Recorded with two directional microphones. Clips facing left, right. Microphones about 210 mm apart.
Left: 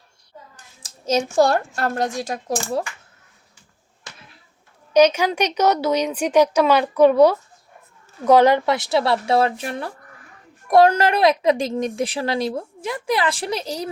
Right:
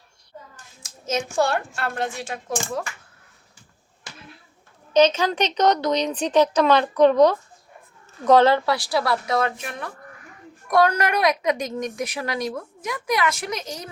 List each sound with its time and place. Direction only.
0.8 s a woman's voice: 35° left (ahead or behind)
4.9 s a woman's voice: 10° left (ahead or behind); by 13.9 s 35° left (ahead or behind)